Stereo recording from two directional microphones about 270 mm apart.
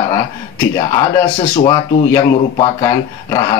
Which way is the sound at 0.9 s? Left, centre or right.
Centre.